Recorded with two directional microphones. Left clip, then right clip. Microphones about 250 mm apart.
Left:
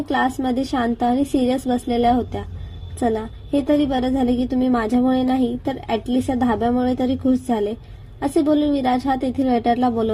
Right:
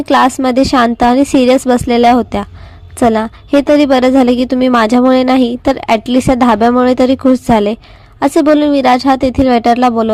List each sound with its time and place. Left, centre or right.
0.1 s a woman's voice: right